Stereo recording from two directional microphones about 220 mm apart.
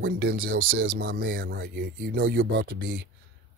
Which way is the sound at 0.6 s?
40° right (ahead or behind).